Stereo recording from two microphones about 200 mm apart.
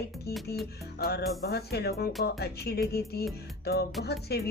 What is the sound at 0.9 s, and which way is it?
Music, 50° left (ahead or behind).